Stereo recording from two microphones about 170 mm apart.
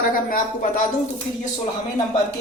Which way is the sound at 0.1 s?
55° left (ahead or behind).